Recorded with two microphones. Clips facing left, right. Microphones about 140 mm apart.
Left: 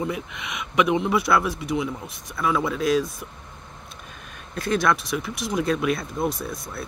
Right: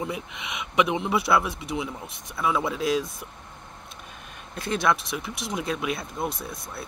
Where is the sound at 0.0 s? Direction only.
25° right (ahead or behind).